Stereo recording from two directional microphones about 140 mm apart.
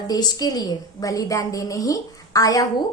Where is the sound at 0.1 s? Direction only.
25° left (ahead or behind).